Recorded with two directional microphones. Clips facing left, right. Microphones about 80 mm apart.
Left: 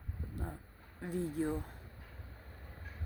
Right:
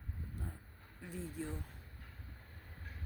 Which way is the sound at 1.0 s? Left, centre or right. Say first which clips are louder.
Left 8 dB; left.